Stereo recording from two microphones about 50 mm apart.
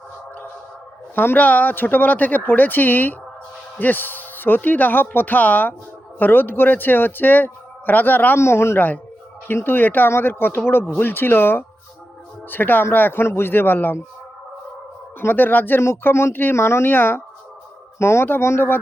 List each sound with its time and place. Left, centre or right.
1.1 s speech: left
1.4 s speech: left
8.4 s a man's voice: left
9.6 s speech: left
15.2 s speech: left
18.0 s a man's voice: left